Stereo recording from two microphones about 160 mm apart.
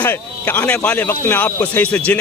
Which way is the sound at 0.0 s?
10° left (ahead or behind).